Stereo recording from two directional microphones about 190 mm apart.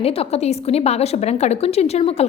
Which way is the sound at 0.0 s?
30° left (ahead or behind).